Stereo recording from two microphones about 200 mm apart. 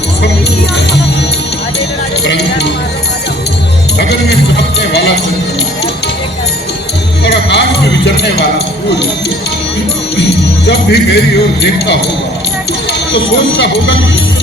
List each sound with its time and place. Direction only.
2.2 s a sound: 55° left (ahead or behind)
3.9 s music: 55° left (ahead or behind)
7.3 s music: 55° left (ahead or behind)
8.0 s speech: 60° left (ahead or behind)
10.7 s speech: 55° left (ahead or behind)
13.1 s speech: 60° left (ahead or behind)